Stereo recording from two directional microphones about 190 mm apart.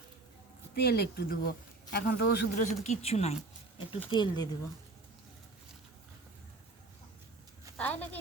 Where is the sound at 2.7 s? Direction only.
35° left (ahead or behind).